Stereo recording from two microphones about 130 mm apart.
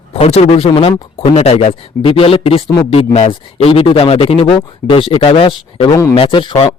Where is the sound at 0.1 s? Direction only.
55° left (ahead or behind).